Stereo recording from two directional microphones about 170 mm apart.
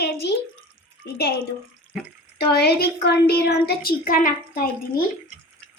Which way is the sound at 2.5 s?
75° left (ahead or behind).